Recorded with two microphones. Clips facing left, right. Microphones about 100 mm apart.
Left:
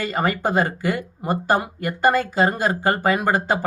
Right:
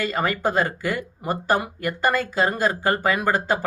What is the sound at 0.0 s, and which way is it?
Speech, 25° left (ahead or behind).